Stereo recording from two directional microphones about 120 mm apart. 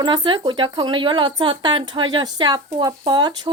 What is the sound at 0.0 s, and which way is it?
Speech, 40° right (ahead or behind).